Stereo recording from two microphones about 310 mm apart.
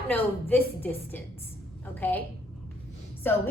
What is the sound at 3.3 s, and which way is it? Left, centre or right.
Speech, centre.